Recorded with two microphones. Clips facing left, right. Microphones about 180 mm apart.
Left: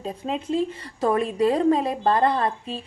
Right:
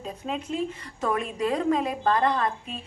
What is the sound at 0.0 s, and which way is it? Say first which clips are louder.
A woman's voice: left 4 dB; 30° left (ahead or behind).